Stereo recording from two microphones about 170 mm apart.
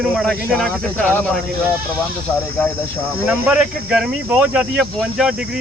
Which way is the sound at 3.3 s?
5° right (ahead or behind).